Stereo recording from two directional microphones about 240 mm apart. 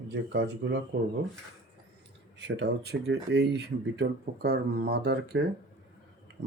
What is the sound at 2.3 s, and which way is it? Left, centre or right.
Speech, right.